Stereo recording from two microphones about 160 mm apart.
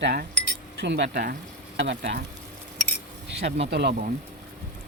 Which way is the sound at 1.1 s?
75° right (ahead or behind).